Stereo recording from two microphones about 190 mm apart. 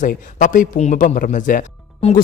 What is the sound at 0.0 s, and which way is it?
Speech, 45° left (ahead or behind).